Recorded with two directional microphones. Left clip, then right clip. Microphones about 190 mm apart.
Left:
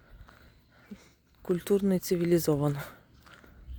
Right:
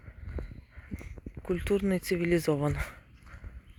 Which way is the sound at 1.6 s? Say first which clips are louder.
Left 1 dB; 30° left (ahead or behind).